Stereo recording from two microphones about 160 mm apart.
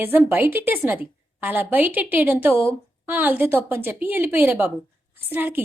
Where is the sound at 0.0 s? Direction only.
10° right (ahead or behind).